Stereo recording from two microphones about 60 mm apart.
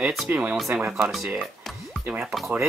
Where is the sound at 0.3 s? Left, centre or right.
Right.